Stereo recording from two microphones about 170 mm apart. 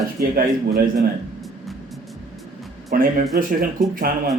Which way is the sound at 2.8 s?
55° right (ahead or behind).